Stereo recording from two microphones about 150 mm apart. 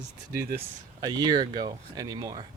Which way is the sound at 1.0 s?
25° right (ahead or behind).